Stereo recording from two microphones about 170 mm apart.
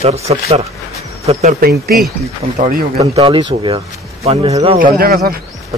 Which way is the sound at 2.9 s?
35° right (ahead or behind).